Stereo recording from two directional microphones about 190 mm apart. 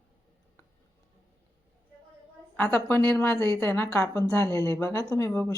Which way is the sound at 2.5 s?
10° left (ahead or behind).